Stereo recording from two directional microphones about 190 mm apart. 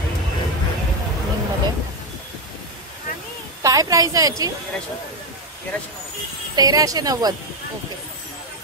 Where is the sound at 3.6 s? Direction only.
20° right (ahead or behind).